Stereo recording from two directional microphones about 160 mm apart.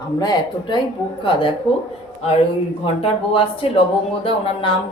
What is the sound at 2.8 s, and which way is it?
A man's voice, 35° left (ahead or behind).